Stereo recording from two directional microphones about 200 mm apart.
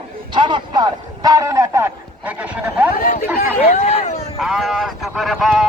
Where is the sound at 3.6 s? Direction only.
30° left (ahead or behind).